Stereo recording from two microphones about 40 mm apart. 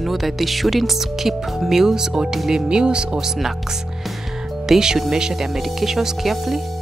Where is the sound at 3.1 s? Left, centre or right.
Centre.